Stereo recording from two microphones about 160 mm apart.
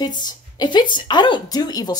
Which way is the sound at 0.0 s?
25° left (ahead or behind).